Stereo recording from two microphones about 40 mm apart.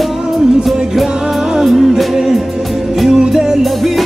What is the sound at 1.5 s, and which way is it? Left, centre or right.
Music, centre.